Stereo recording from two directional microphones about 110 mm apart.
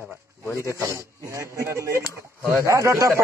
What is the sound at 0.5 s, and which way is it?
Speech, 30° left (ahead or behind).